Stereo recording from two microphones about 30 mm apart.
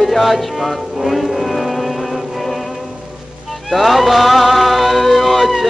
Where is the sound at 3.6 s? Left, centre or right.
Centre.